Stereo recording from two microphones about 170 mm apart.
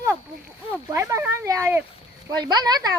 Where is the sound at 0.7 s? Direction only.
10° right (ahead or behind).